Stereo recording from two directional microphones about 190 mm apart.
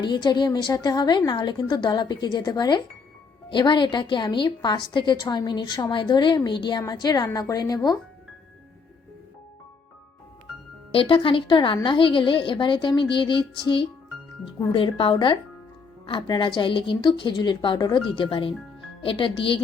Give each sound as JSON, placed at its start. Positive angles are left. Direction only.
{"t": 0.0, "sound": "a woman's voice", "side_deg": 25}
{"t": 10.9, "sound": "a woman's voice", "side_deg": 25}